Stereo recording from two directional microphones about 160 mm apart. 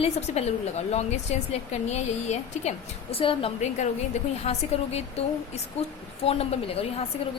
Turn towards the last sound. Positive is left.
turn(degrees=40)  # may be behind; listen again after turning